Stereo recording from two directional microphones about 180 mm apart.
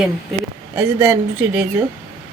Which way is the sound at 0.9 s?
15° right (ahead or behind).